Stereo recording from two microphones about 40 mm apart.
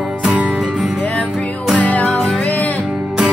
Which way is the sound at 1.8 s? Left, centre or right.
Left.